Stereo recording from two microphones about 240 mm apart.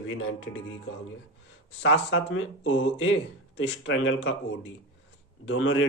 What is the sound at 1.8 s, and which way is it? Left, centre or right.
A man's voice, left.